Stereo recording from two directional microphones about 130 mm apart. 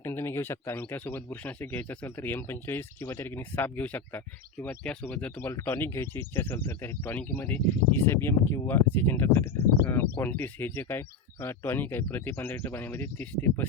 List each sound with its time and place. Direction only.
0.0 s speech: 20° left (ahead or behind)